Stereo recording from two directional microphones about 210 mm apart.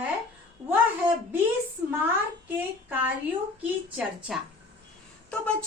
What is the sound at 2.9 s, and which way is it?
A woman's voice, 10° right (ahead or behind).